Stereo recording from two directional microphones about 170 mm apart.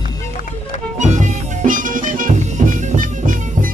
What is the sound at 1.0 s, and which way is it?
Music, 45° right (ahead or behind).